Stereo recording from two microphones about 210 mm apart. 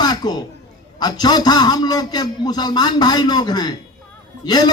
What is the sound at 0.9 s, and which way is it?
A man's voice, 20° left (ahead or behind).